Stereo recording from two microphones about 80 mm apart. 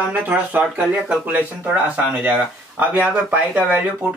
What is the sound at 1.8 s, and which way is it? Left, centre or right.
Speech, centre.